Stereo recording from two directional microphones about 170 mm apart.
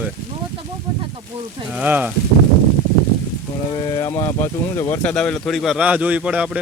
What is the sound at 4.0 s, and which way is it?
Speech, 20° left (ahead or behind).